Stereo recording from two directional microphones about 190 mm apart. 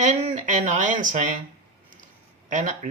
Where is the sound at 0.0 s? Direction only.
40° right (ahead or behind).